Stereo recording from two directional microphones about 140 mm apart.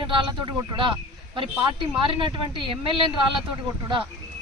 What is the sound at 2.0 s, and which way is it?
Speech, 40° right (ahead or behind).